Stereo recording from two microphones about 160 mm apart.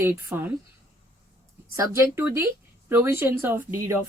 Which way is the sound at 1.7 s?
15° right (ahead or behind).